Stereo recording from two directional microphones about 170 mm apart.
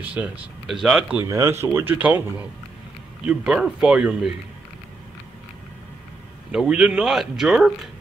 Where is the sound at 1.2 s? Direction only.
15° right (ahead or behind).